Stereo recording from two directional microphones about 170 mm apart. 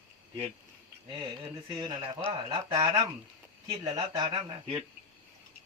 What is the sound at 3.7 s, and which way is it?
Speech, 20° right (ahead or behind).